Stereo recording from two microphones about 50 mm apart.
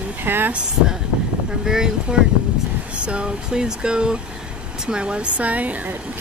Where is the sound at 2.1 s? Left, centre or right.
Centre.